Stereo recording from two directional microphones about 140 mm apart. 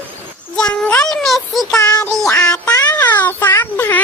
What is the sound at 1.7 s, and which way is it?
Music, 20° left (ahead or behind).